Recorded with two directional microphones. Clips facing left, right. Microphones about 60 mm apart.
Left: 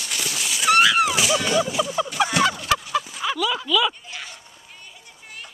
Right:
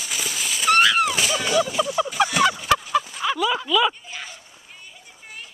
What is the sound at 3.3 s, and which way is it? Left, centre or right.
Speech, centre.